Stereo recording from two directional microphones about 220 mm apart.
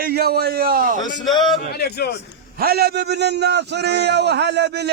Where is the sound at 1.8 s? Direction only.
45° left (ahead or behind).